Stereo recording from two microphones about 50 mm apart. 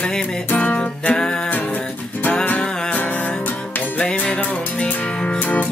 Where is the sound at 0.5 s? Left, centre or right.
Left.